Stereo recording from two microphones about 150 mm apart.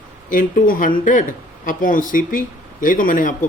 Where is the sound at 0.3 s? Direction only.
65° left (ahead or behind).